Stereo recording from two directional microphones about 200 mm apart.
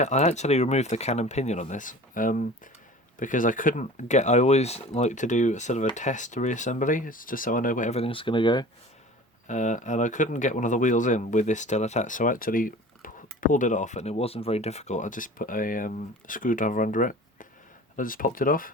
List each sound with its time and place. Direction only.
0.0 s speech: 35° left (ahead or behind)
9.5 s speech: 40° left (ahead or behind)